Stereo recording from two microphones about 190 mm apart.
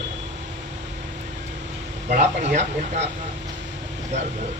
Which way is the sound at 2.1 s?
40° right (ahead or behind).